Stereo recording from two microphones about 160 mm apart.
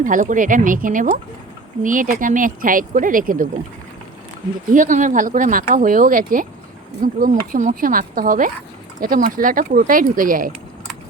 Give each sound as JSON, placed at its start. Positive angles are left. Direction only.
{"t": 0.0, "sound": "speech", "side_deg": -55}
{"t": 4.7, "sound": "speech", "side_deg": -55}